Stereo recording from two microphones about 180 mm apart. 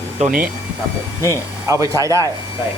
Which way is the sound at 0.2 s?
50° right (ahead or behind).